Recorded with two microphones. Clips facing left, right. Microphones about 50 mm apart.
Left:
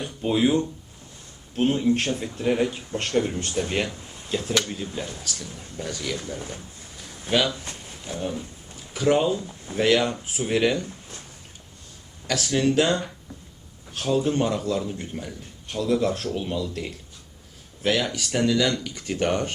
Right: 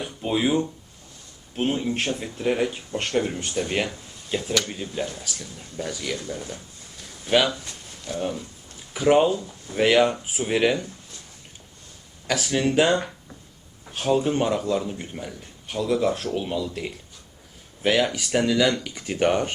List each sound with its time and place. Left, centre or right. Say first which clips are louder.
0.0 s a man's voice: left 2 dB; centre
6.1 s speech: even; left
7.3 s a man's voice: right 2 dB; centre
7.9 s a sound: right 4 dB; centre
8.9 s a man's voice: right 3 dB; centre
12.3 s a man's voice: even; centre